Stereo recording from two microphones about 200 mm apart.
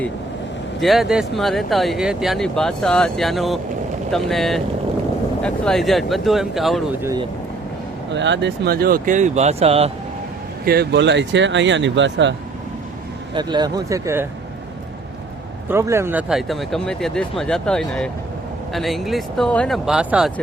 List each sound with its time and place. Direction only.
0.8 s speech: centre (ahead or behind)
7.0 s speech: 20° right (ahead or behind)
8.1 s speech: 60° right (ahead or behind); by 9.9 s 30° right (ahead or behind)
10.7 s speech: 55° right (ahead or behind)
13.3 s speech: 20° right (ahead or behind)
15.7 s speech: 15° right (ahead or behind)